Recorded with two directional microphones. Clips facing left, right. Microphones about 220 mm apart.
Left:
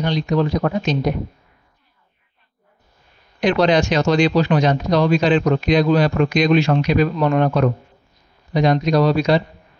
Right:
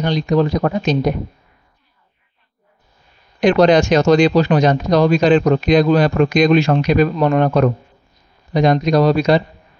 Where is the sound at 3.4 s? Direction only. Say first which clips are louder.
Right 4 dB; 45° right (ahead or behind).